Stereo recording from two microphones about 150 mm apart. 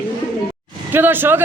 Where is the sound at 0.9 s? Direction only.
15° right (ahead or behind).